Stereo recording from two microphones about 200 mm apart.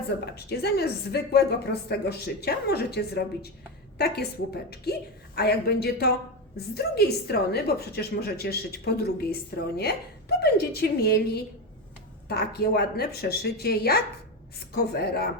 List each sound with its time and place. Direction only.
0.3 s a woman's voice: 55° left (ahead or behind)